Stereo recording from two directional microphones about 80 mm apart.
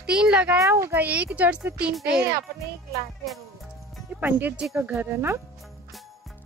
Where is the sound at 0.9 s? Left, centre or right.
Centre.